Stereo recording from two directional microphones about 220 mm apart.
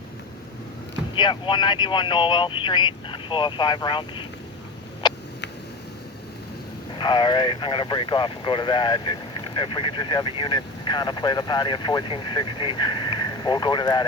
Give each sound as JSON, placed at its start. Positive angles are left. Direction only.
{"t": 1.1, "sound": "speech", "side_deg": 20}
{"t": 5.0, "sound": "a sound", "side_deg": 20}
{"t": 7.0, "sound": "speech", "side_deg": 20}